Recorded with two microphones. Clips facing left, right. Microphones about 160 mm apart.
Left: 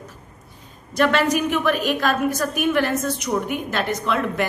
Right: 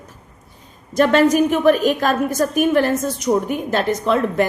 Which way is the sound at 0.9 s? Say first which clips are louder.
Right 5 dB; 40° right (ahead or behind).